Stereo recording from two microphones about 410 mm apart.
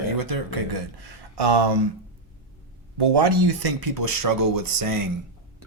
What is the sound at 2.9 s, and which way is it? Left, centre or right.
Speech, right.